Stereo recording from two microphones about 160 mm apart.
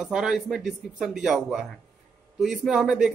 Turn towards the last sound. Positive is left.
turn(degrees=-5)  # may be behind; listen again after turning